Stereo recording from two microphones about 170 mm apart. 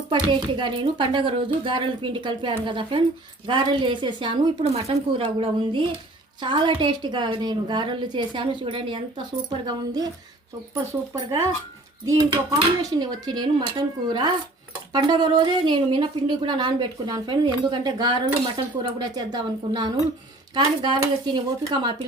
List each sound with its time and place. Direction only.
0.1 s a woman's voice: 25° right (ahead or behind)
11.1 s a woman's voice: 15° right (ahead or behind)